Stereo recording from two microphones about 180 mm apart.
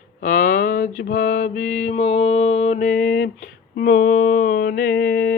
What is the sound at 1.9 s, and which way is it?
Mantra, 35° left (ahead or behind).